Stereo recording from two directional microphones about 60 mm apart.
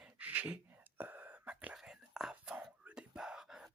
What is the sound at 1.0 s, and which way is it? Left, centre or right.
Whispering, right.